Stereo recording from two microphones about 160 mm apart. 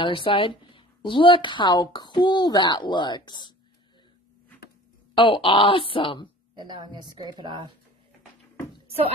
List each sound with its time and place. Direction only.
0.0 s a woman's voice: 30° left (ahead or behind)
5.1 s speech: 35° left (ahead or behind)
6.5 s speech: 25° right (ahead or behind)